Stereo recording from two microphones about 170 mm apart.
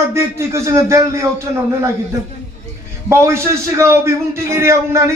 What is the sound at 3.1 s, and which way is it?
A man's voice, 15° right (ahead or behind).